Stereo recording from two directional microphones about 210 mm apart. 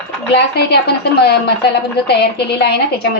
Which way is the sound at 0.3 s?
50° left (ahead or behind).